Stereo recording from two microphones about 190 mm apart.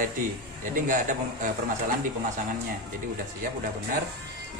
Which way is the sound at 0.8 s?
45° right (ahead or behind).